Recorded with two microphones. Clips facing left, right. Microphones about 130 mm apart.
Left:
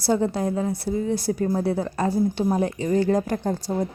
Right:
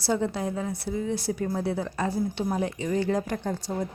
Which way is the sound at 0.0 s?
40° left (ahead or behind).